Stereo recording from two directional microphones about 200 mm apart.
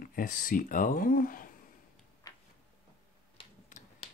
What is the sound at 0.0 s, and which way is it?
Speech, 45° left (ahead or behind).